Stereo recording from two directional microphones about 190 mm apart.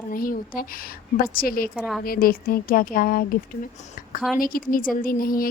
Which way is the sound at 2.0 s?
50° left (ahead or behind).